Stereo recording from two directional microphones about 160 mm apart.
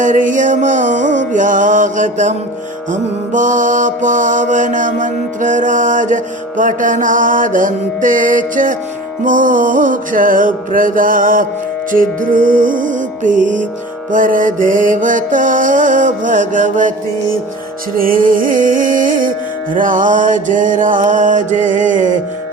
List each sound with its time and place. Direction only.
0.0 s music: 55° right (ahead or behind)
17.9 s music: 65° right (ahead or behind)